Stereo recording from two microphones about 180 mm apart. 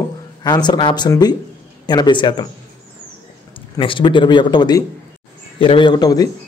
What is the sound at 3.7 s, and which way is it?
A man's voice, 25° left (ahead or behind).